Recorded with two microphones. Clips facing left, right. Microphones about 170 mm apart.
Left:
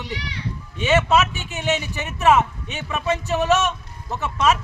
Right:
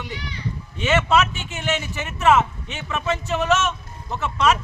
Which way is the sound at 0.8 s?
20° left (ahead or behind).